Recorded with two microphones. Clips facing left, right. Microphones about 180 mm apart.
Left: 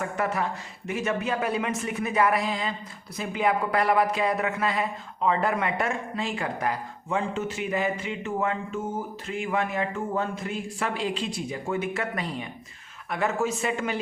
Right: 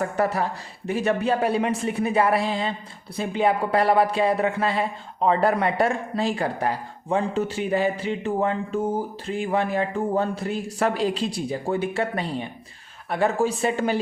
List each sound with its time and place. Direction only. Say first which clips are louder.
0.0 s speech: right 4 dB; 35° right (ahead or behind)